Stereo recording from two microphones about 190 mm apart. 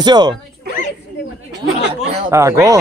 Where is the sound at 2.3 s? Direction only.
15° right (ahead or behind).